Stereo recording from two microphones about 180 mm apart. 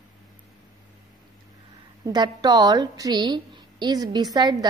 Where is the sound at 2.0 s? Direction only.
25° right (ahead or behind).